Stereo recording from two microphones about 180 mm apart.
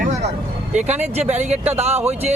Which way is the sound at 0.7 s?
40° right (ahead or behind).